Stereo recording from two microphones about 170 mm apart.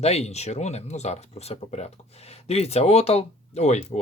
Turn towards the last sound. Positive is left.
turn(degrees=40)  # may be behind; listen again after turning